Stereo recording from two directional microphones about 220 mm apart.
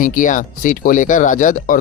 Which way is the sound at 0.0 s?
40° left (ahead or behind).